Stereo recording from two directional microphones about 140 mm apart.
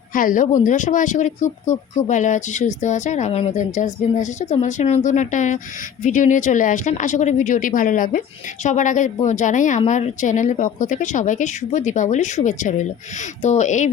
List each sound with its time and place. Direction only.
0.1 s speech: 75° left (ahead or behind)
0.6 s speech: 65° left (ahead or behind)